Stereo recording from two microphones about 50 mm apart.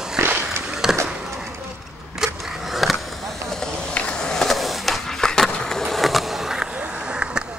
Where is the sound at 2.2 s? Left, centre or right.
Centre.